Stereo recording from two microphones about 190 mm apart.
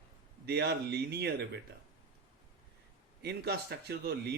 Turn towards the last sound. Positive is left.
turn(degrees=-60)  # may be behind; listen again after turning